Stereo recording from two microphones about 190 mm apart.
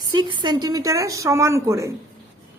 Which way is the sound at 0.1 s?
25° right (ahead or behind).